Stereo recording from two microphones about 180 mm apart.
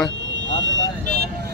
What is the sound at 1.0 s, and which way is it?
Vehicle, 65° right (ahead or behind).